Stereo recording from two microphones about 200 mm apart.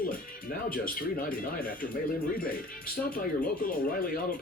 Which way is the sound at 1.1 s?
45° left (ahead or behind).